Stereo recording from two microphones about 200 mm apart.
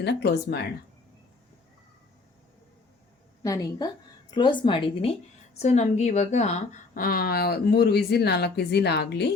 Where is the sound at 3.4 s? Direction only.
15° left (ahead or behind); by 9.3 s 55° left (ahead or behind).